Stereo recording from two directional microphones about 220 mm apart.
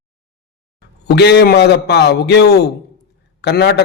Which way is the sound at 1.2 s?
50° left (ahead or behind).